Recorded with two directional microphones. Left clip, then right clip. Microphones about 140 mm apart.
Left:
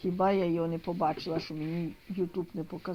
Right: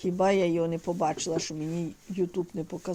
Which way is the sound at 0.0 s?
70° right (ahead or behind).